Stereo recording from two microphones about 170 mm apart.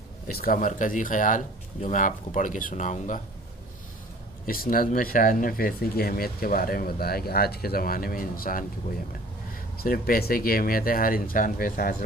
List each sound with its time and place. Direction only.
0.3 s speech: 60° left (ahead or behind)
4.5 s speech: 55° left (ahead or behind)
9.8 s speech: 55° left (ahead or behind)